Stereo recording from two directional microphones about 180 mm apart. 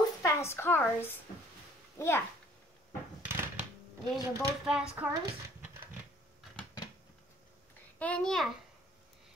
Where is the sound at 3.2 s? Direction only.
10° right (ahead or behind).